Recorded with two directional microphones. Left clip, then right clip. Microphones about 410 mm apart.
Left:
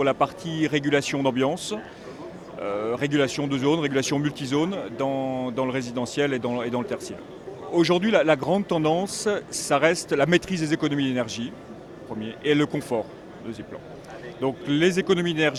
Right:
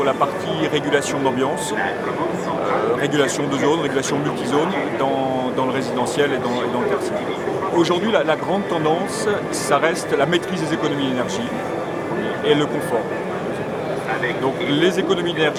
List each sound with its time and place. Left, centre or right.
0.0 s speech: left
3.0 s speech: left
7.8 s speech: left
14.7 s speech: left